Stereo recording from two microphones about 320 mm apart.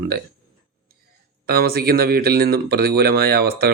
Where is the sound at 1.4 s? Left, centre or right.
Right.